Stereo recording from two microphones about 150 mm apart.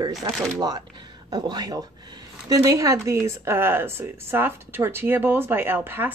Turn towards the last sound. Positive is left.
turn(degrees=-15)  # may be behind; listen again after turning